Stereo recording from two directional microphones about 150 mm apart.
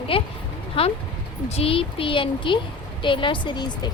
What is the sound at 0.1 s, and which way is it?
A woman's voice, 35° left (ahead or behind).